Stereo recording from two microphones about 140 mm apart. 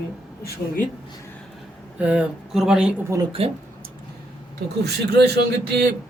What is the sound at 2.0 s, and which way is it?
Speech, 10° right (ahead or behind).